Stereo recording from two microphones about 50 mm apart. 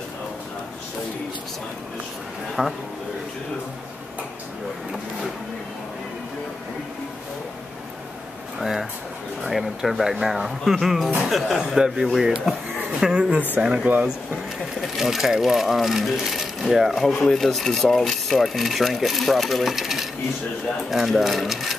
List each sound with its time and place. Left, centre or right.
2.6 s speech: centre
8.5 s a sound: centre
9.4 s speech: centre
11.8 s speech: centre
13.9 s speech: right
14.8 s speech: centre